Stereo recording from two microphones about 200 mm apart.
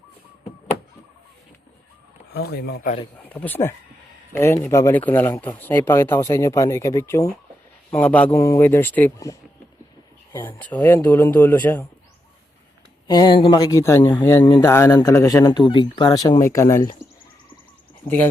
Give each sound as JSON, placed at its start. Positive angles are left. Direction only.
{"t": 2.3, "sound": "speech", "side_deg": 50}
{"t": 3.2, "sound": "speech", "side_deg": 10}
{"t": 13.1, "sound": "speech", "side_deg": 20}